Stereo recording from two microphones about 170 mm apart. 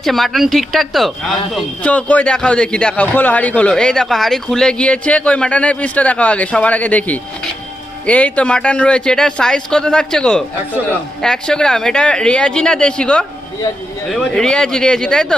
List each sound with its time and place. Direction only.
0.0 s a man's voice: centre (ahead or behind)